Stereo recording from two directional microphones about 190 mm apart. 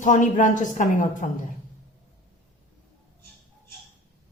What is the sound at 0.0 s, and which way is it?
A woman's voice, 40° left (ahead or behind).